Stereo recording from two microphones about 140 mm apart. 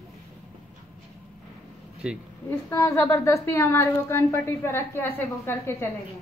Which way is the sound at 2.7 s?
20° left (ahead or behind).